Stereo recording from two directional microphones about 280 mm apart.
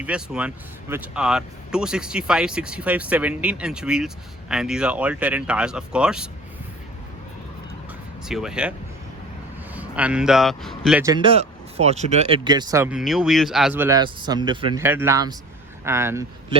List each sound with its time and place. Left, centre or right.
0.0 s speech: centre
8.3 s speech: centre
9.7 s speech: centre
11.0 s speech: centre